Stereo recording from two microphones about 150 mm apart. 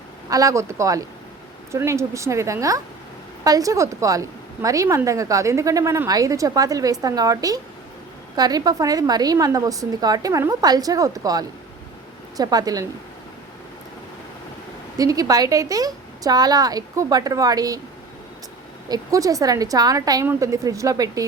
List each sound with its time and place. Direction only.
0.3 s a woman's voice: 25° right (ahead or behind)
14.9 s a woman's voice: 25° right (ahead or behind)
18.9 s a woman's voice: 25° right (ahead or behind)